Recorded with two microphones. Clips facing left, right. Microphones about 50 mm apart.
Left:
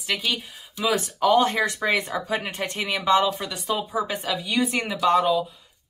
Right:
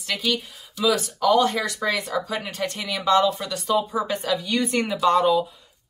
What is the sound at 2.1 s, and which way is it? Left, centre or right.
Speech, left.